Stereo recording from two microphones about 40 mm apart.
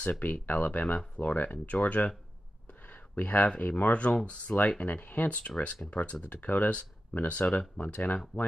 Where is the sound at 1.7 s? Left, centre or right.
Left.